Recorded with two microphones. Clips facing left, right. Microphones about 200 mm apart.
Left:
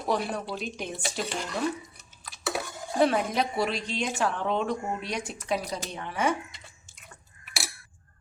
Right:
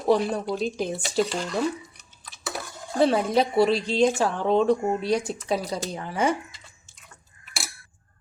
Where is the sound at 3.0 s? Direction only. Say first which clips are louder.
Right 4 dB; 30° right (ahead or behind).